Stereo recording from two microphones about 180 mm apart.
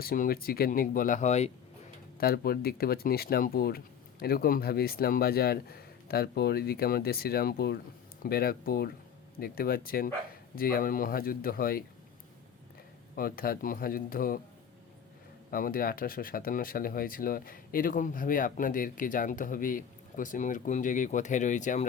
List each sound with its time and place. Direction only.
0.0 s speech: 55° left (ahead or behind); by 1.5 s 40° left (ahead or behind)
2.1 s speech: 55° left (ahead or behind)
13.1 s speech: 55° left (ahead or behind)
15.4 s speech: 50° left (ahead or behind)